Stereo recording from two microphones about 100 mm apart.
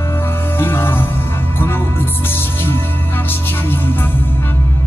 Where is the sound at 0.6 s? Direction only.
25° left (ahead or behind).